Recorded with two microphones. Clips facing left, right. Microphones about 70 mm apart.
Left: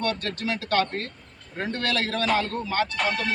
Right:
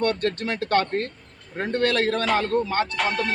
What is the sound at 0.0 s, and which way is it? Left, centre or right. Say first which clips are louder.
A man's voice: right 4 dB; right.